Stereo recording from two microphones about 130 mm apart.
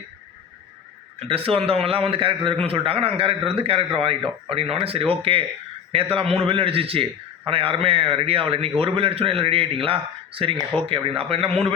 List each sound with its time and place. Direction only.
1.2 s a man's voice: 45° right (ahead or behind)